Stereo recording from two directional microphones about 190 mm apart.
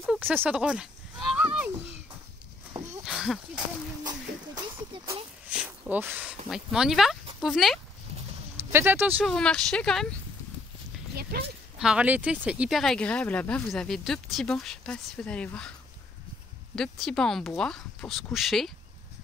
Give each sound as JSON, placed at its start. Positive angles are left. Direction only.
{"t": 0.2, "sound": "a sound", "side_deg": -10}
{"t": 3.1, "sound": "a sound", "side_deg": 0}
{"t": 4.0, "sound": "a sound", "side_deg": -20}
{"t": 5.9, "sound": "speech", "side_deg": -10}
{"t": 8.7, "sound": "speech", "side_deg": -10}
{"t": 9.2, "sound": "speech", "side_deg": 0}
{"t": 11.3, "sound": "speech", "side_deg": -55}
{"t": 11.8, "sound": "speech", "side_deg": -5}
{"t": 16.7, "sound": "speech", "side_deg": 0}